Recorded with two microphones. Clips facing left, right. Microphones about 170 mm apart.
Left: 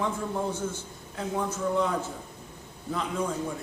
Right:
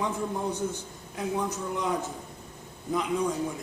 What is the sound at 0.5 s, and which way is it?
Speech, 15° right (ahead or behind).